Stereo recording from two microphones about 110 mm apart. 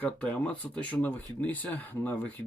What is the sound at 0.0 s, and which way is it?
Speech, 10° left (ahead or behind).